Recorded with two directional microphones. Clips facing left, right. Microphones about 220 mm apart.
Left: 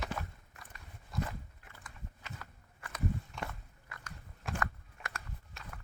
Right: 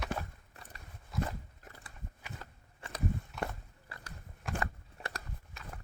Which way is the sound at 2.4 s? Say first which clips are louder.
Right 2 dB; 30° right (ahead or behind).